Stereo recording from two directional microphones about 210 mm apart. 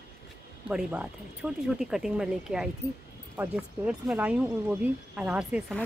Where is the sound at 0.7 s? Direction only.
5° right (ahead or behind).